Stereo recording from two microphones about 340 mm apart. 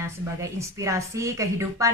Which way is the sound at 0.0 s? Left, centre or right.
Centre.